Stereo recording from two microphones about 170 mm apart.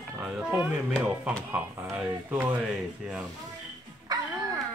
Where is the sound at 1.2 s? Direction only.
10° right (ahead or behind).